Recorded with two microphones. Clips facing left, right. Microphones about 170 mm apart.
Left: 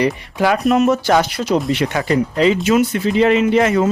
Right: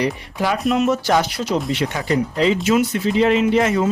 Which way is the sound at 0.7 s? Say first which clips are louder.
Left 2 dB; 50° left (ahead or behind).